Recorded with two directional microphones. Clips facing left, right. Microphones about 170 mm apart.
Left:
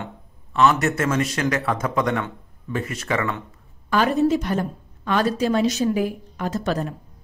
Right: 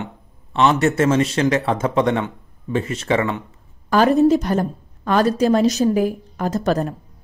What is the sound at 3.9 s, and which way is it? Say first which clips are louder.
A woman's voice: right 5 dB; 40° right (ahead or behind).